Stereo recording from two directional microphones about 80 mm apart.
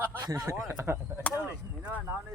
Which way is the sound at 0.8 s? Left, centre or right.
Right.